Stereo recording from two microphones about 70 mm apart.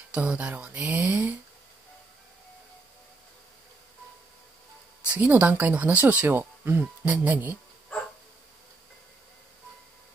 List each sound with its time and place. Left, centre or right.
0.1 s speech: centre
5.0 s speech: right